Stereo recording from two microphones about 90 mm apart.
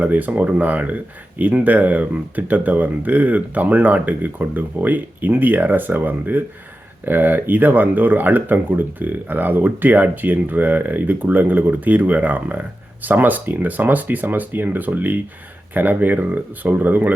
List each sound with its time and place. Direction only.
0.0 s speech: 20° right (ahead or behind)